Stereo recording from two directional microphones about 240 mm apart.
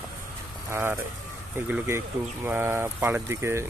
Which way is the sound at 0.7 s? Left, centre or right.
Centre.